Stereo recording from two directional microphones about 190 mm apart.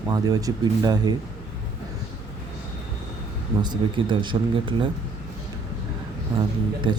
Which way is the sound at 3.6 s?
25° right (ahead or behind).